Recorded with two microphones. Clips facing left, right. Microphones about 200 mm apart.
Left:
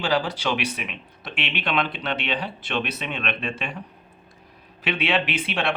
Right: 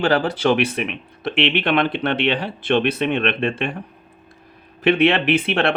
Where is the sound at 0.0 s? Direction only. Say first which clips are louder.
Right 6 dB; 55° right (ahead or behind).